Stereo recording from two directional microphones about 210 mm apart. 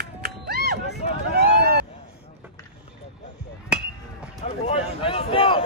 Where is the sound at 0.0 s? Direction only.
50° right (ahead or behind).